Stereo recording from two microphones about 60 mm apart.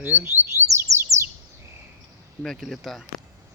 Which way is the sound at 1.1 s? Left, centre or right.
Right.